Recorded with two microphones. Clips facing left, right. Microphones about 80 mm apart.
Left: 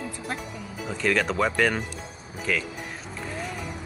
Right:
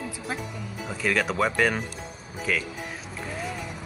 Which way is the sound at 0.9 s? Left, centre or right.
Centre.